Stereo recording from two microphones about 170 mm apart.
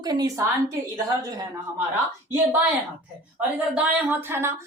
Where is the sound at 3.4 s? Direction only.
10° right (ahead or behind).